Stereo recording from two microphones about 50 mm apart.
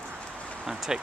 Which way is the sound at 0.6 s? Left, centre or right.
Centre.